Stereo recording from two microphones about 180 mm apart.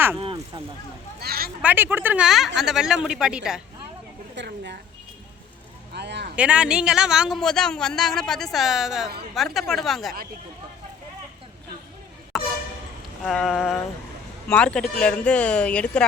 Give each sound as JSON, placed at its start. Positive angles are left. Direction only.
{"t": 0.2, "sound": "speech", "side_deg": -30}
{"t": 1.2, "sound": "speech", "side_deg": -60}
{"t": 1.6, "sound": "speech", "side_deg": -10}
{"t": 4.4, "sound": "a sound", "side_deg": -70}
{"t": 5.9, "sound": "speech", "side_deg": -70}
{"t": 6.3, "sound": "speech", "side_deg": -5}
{"t": 12.3, "sound": "vehicle", "side_deg": 0}
{"t": 13.2, "sound": "speech", "side_deg": 0}